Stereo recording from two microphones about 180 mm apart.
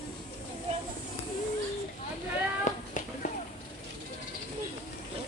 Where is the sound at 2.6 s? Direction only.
45° left (ahead or behind).